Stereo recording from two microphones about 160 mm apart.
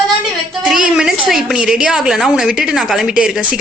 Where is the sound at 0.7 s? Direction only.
5° right (ahead or behind).